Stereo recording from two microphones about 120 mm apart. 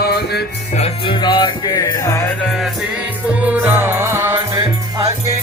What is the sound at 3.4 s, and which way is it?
Music, 15° right (ahead or behind).